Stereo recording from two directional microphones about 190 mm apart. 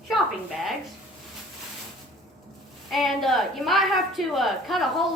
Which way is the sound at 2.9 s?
Centre (ahead or behind).